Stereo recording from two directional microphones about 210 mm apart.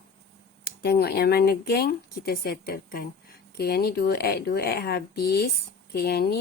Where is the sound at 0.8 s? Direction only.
50° left (ahead or behind).